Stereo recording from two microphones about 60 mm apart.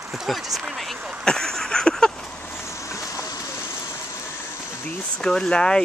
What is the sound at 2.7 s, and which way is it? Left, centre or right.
Boat, left.